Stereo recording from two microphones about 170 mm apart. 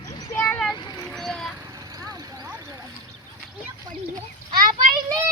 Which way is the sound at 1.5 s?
20° right (ahead or behind).